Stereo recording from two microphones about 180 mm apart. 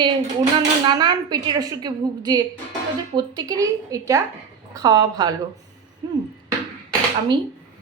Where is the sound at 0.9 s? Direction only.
25° right (ahead or behind).